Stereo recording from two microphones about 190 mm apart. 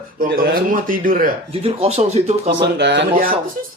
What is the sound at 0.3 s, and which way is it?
Speech, 50° right (ahead or behind).